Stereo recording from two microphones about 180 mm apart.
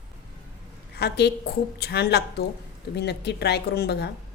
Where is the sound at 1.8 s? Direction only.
65° left (ahead or behind).